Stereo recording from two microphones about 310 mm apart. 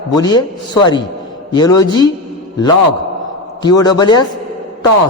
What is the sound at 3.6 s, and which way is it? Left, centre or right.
Speech, centre.